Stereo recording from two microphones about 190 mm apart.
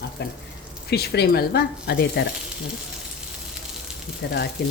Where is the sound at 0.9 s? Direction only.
55° left (ahead or behind).